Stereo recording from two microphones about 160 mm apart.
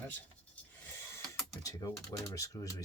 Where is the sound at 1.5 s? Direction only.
20° left (ahead or behind).